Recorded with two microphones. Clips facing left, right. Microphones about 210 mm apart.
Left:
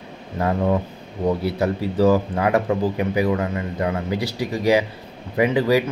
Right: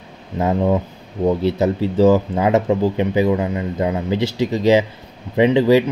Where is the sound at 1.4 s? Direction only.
20° right (ahead or behind).